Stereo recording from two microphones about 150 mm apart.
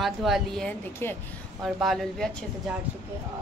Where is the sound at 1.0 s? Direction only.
15° left (ahead or behind).